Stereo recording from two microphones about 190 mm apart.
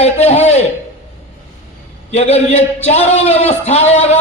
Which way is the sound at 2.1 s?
35° left (ahead or behind).